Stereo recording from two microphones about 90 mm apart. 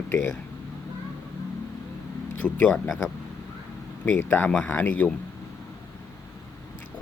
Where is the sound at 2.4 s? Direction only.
10° left (ahead or behind).